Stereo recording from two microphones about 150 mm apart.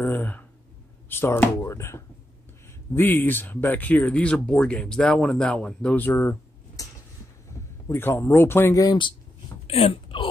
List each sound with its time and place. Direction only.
0.0 s a sound: 10° left (ahead or behind)
1.0 s speech: 15° left (ahead or behind)
7.9 s speech: 15° left (ahead or behind)
9.7 s speech: 40° left (ahead or behind)